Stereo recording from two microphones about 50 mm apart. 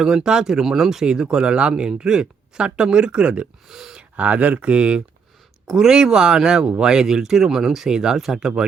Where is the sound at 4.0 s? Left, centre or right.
Right.